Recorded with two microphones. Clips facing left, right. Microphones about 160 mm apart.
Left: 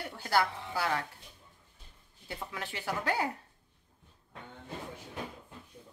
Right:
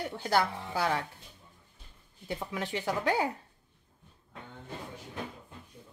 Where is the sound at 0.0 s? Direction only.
20° right (ahead or behind).